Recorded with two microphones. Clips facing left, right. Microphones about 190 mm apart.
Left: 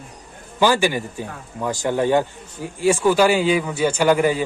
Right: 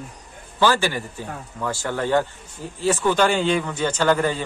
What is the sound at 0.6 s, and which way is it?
A man's voice, 15° left (ahead or behind).